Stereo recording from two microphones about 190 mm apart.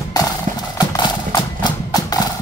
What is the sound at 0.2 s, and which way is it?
Clip-clop, 20° left (ahead or behind).